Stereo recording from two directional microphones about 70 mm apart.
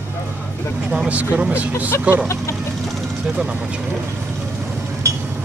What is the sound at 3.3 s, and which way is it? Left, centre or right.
Speech, centre.